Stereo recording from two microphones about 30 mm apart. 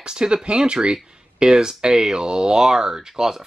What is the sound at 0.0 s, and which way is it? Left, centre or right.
Speech, right.